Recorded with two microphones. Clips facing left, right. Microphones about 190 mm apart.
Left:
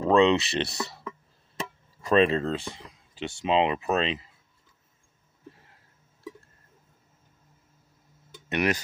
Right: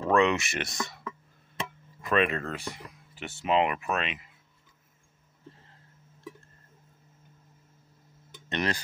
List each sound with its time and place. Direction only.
0.0 s speech: 20° left (ahead or behind)
8.5 s speech: 15° left (ahead or behind)